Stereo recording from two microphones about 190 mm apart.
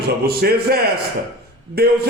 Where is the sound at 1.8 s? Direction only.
55° right (ahead or behind).